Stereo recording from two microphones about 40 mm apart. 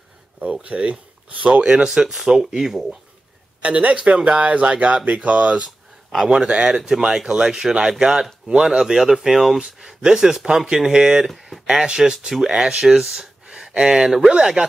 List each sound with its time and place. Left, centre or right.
0.5 s speech: right
1.6 s a man's voice: centre
2.6 s speech: centre
3.6 s a man's voice: right
6.9 s a man's voice: centre
11.2 s a sound: centre
11.6 s a man's voice: centre